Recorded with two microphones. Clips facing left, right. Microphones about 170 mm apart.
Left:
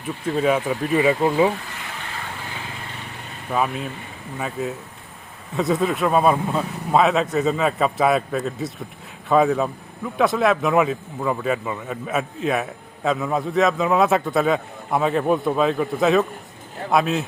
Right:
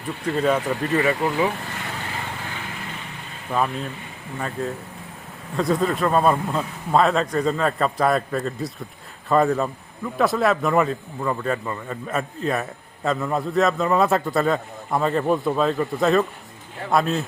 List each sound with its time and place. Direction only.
0.3 s a man's voice: 5° left (ahead or behind)
0.9 s speech: 20° left (ahead or behind)
3.5 s a man's voice: 5° left (ahead or behind)